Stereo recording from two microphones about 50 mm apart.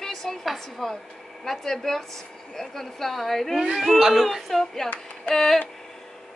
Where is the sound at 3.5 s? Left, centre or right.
Centre.